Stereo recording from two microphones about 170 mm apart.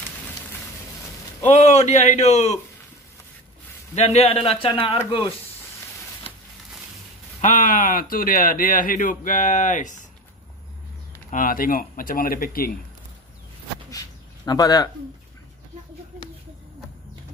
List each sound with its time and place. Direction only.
1.5 s a man's voice: 40° left (ahead or behind)
3.9 s a man's voice: 40° left (ahead or behind)
7.4 s a man's voice: 50° left (ahead or behind)
11.2 s speech: 55° left (ahead or behind)
13.8 s a sound: 20° left (ahead or behind)